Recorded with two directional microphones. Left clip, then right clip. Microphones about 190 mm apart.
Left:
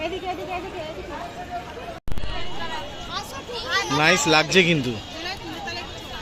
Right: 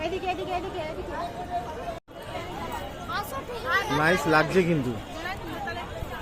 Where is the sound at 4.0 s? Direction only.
25° left (ahead or behind).